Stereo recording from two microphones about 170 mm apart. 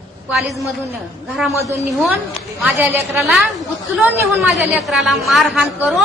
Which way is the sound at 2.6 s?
10° right (ahead or behind).